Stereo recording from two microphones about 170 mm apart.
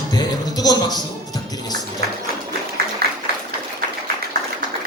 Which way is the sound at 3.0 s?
65° right (ahead or behind).